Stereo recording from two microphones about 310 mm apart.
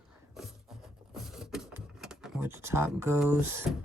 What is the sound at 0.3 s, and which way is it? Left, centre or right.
Printer, centre.